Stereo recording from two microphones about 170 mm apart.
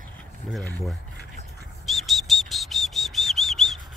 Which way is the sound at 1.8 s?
Centre (ahead or behind).